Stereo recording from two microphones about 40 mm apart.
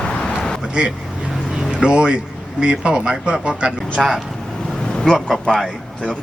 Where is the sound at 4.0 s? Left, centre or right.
Centre.